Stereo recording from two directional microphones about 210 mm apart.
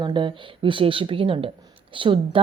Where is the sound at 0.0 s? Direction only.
20° right (ahead or behind).